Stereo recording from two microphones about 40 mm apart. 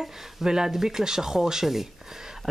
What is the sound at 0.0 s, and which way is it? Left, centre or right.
Speech, centre.